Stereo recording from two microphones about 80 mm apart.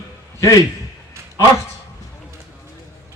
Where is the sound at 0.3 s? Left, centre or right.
Left.